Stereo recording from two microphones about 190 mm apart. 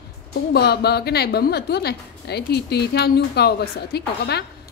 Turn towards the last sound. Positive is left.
turn(degrees=60)  # may be behind; listen again after turning